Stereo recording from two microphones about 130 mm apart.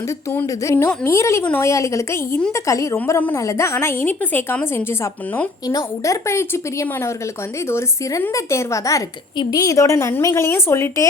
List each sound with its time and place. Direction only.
0.3 s a woman's voice: 20° left (ahead or behind)